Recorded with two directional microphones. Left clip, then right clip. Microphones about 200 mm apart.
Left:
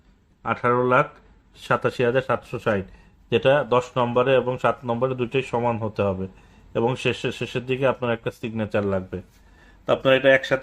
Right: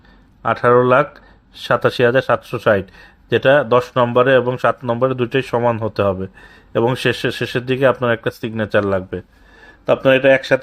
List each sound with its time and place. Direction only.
0.4 s speech: 45° right (ahead or behind)